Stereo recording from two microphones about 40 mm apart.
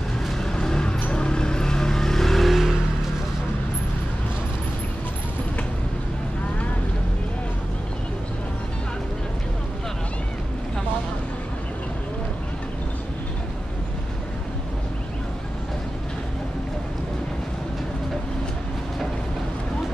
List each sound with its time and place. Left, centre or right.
0.3 s vehicle: centre